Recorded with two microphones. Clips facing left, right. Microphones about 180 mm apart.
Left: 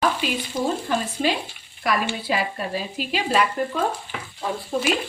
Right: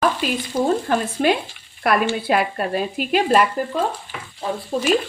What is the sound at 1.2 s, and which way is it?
Speech, 55° right (ahead or behind).